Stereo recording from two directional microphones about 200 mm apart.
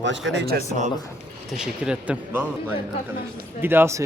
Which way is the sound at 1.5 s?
5° right (ahead or behind).